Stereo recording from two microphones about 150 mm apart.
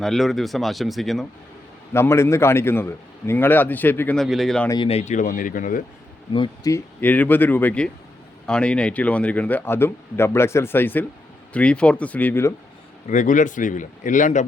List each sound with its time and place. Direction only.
0.0 s speech: centre (ahead or behind)
1.9 s a man's voice: 15° left (ahead or behind)
4.9 s speech: 45° left (ahead or behind); by 5.8 s 65° left (ahead or behind)
6.3 s a man's voice: 30° left (ahead or behind)
13.1 s speech: 55° left (ahead or behind)